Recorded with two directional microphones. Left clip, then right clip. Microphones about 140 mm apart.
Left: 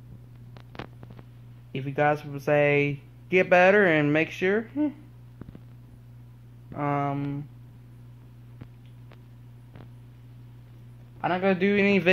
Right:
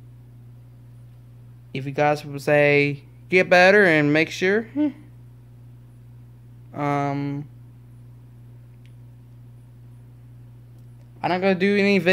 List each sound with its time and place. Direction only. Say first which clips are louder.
1.7 s speech: right 3 dB; 20° right (ahead or behind)
2.6 s speech: right 5 dB; 35° right (ahead or behind)
3.6 s speech: right 4 dB; 25° right (ahead or behind)
4.5 s speech: right 4 dB; 35° right (ahead or behind)
6.7 s speech: right 4 dB; 30° right (ahead or behind)
7.1 s speech: right 4 dB; 50° right (ahead or behind)
11.1 s a man's voice: right 4 dB; 45° right (ahead or behind)
11.6 s speech: right 3 dB; 30° right (ahead or behind)